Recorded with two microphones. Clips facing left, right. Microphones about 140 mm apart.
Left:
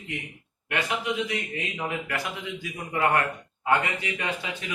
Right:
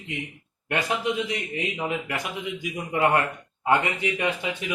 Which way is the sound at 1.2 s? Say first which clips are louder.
Right 2 dB; 20° right (ahead or behind).